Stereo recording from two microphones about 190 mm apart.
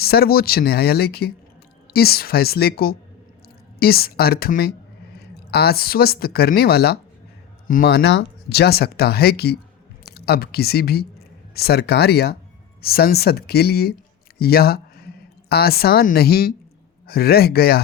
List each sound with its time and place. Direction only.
0.0 s a woman's voice: 55° left (ahead or behind)